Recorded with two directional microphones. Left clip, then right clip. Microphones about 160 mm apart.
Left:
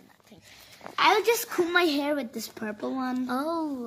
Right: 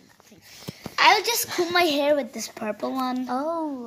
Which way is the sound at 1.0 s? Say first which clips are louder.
Right 3 dB; 55° right (ahead or behind).